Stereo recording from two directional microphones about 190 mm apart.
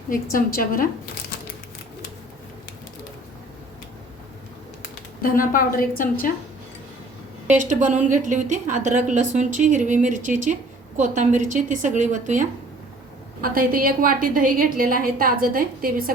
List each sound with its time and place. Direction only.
0.1 s a woman's voice: 50° left (ahead or behind)
5.2 s a woman's voice: 45° left (ahead or behind)
7.4 s a woman's voice: 40° right (ahead or behind)